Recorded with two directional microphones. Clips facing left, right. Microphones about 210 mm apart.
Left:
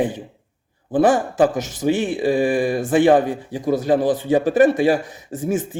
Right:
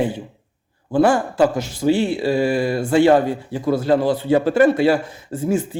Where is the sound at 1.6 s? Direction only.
45° left (ahead or behind).